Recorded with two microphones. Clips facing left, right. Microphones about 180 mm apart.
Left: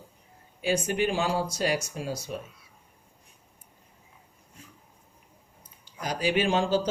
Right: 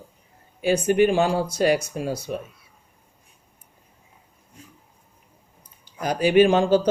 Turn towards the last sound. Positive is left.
turn(degrees=-55)  # may be behind; listen again after turning